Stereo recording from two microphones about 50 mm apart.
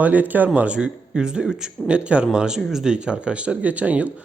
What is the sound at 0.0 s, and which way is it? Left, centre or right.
Speech, right.